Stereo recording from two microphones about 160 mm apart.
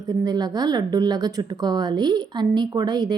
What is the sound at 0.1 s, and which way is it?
A woman's voice, 25° right (ahead or behind).